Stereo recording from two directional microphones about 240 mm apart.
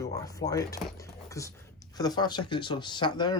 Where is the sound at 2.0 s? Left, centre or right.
Centre.